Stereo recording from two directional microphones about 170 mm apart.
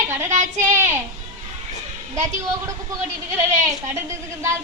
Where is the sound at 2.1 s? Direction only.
15° right (ahead or behind).